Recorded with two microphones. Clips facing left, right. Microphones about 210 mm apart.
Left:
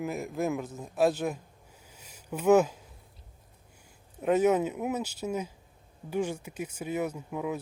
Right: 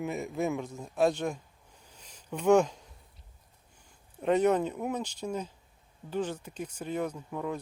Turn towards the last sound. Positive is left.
turn(degrees=5)  # may be behind; listen again after turning